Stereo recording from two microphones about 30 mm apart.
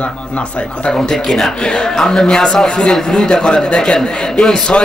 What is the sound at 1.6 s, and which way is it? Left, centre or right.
Speech, left.